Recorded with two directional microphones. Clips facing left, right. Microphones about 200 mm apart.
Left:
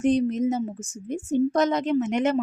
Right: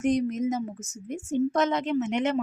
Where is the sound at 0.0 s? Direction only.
30° left (ahead or behind).